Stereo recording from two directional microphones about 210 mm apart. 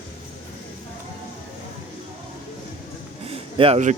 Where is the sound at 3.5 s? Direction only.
25° right (ahead or behind).